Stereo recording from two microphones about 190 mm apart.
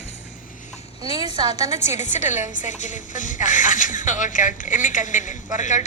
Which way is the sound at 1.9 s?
40° left (ahead or behind).